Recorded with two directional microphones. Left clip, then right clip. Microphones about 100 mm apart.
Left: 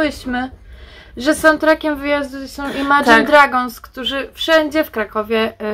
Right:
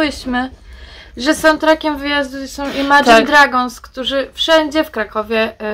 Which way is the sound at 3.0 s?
30° right (ahead or behind).